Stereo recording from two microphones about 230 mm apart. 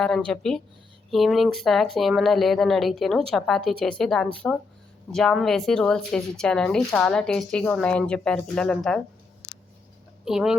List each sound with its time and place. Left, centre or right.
0.3 s speech: centre
10.2 s speech: centre